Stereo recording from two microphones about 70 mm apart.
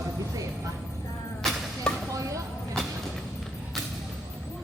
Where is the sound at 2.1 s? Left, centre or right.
Right.